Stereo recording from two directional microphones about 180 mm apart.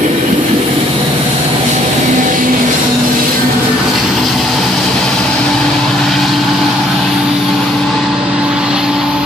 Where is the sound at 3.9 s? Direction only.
Centre (ahead or behind).